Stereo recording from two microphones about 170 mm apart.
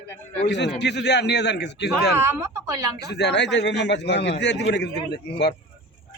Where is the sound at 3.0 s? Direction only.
85° left.